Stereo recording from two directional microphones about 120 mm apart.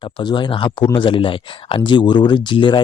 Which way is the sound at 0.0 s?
40° left (ahead or behind).